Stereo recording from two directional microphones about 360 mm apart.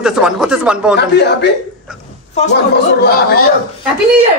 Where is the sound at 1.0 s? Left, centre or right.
Left.